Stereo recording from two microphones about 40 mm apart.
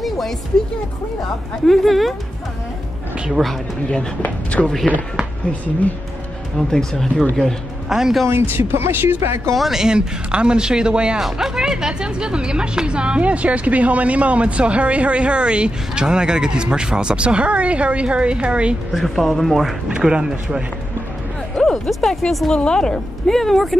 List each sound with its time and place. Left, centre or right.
1.7 s speech: centre
3.3 s speech: centre
4.5 s speech: left
6.7 s speech: centre
7.9 s speech: centre
8.3 s speech: right
9.6 s speech: centre
9.8 s a woman's voice: right
11.1 s a woman's voice: centre; by 18.8 s right
18.9 s speech: centre
20.0 s speech: centre
21.5 s speech: centre
22.5 s speech: left; by 23.8 s centre